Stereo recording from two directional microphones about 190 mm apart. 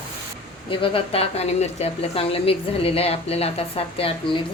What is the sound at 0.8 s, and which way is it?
A woman's voice, 30° left (ahead or behind).